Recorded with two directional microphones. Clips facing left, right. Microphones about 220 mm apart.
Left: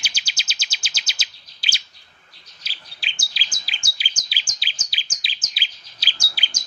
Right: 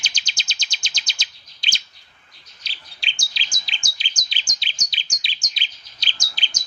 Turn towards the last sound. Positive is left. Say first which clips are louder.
# even
turn(degrees=10)  # may be behind; listen again after turning